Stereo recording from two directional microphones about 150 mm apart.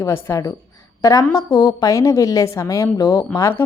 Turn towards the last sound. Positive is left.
turn(degrees=15)  # may be behind; listen again after turning